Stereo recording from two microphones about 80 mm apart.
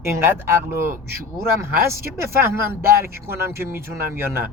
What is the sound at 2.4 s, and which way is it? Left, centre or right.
Speech, right.